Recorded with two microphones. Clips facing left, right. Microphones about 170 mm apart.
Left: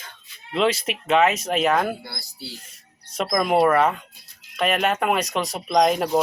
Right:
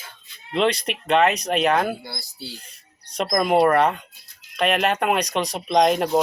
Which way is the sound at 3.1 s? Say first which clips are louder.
Right 1 dB; centre (ahead or behind).